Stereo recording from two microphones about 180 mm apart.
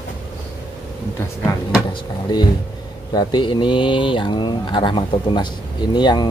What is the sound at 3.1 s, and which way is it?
Speech, 25° left (ahead or behind).